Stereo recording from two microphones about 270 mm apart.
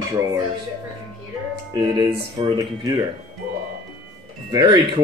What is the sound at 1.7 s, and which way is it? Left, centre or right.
Speech, centre.